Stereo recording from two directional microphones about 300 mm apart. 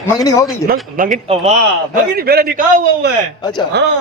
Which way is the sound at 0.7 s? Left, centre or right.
Right.